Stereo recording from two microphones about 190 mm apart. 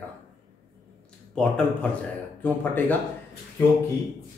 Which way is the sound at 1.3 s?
5° left (ahead or behind).